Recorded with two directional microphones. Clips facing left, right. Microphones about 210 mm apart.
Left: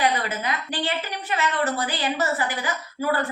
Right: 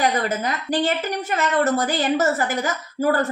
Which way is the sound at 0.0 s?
45° right (ahead or behind).